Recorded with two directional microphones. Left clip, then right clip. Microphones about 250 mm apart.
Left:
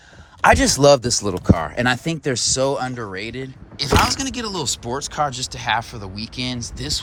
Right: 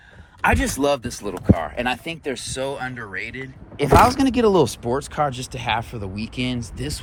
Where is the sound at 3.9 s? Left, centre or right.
Centre.